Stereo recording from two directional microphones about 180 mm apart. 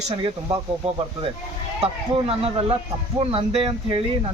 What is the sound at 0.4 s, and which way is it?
Speech, 30° right (ahead or behind).